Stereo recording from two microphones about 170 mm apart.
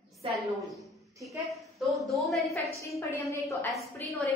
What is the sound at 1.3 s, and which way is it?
A woman's voice, centre (ahead or behind).